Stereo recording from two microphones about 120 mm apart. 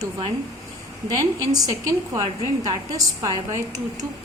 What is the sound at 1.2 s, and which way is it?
A woman's voice, 30° right (ahead or behind).